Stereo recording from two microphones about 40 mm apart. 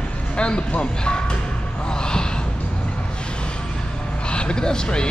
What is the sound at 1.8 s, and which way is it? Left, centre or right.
Gasp, centre.